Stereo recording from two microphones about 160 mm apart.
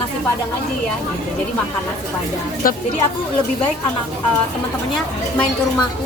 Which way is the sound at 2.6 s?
60° left (ahead or behind).